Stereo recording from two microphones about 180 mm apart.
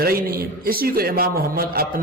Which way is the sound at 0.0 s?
55° right (ahead or behind).